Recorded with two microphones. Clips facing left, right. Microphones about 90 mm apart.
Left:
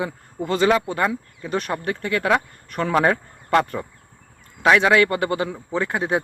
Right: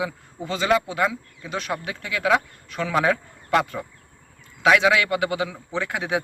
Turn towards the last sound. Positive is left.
turn(degrees=40)  # may be behind; listen again after turning